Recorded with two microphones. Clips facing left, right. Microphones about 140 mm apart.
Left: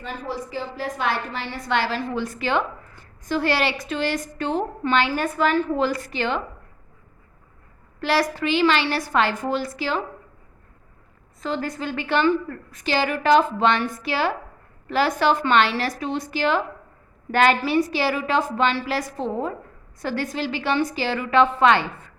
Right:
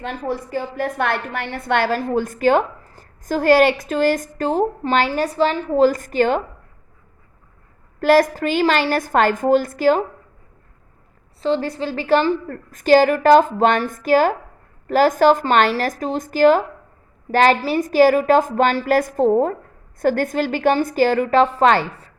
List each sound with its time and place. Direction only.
0.0 s a woman's voice: 60° right (ahead or behind)
7.9 s a woman's voice: 45° right (ahead or behind)
11.3 s a woman's voice: 30° right (ahead or behind)